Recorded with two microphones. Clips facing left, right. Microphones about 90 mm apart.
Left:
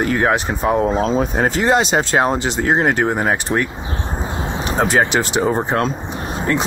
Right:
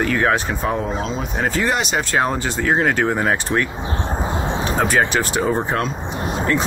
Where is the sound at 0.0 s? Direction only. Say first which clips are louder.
Left 1 dB; 30° left (ahead or behind).